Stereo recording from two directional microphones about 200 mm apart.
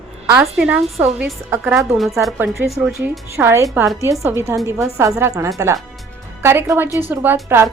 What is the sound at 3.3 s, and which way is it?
A woman's voice, 15° right (ahead or behind).